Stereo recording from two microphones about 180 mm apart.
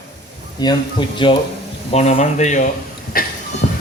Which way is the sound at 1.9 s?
35° left (ahead or behind).